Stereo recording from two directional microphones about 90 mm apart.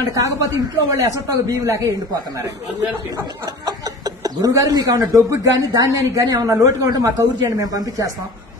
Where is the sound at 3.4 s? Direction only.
45° right (ahead or behind).